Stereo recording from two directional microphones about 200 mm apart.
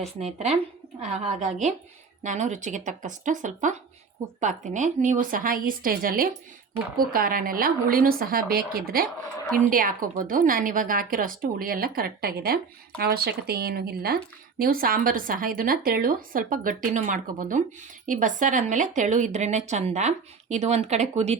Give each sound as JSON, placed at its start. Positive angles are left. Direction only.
{"t": 0.0, "sound": "a woman's voice", "side_deg": -35}